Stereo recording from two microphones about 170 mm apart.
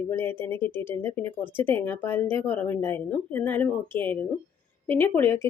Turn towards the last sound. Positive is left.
turn(degrees=15)  # may be behind; listen again after turning